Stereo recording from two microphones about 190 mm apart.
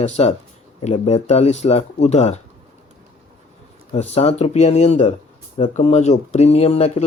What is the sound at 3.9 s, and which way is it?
Speech, 35° left (ahead or behind).